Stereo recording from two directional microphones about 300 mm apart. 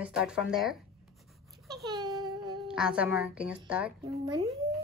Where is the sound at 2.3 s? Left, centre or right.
Centre.